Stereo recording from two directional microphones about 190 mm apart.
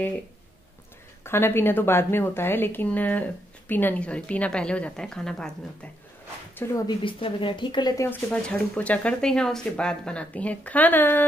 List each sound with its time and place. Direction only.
1.2 s a woman's voice: 10° left (ahead or behind)
6.5 s speech: 15° left (ahead or behind)
8.1 s a woman's voice: 5° left (ahead or behind)